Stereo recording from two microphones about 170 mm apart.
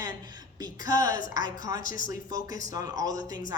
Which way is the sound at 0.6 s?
25° right (ahead or behind).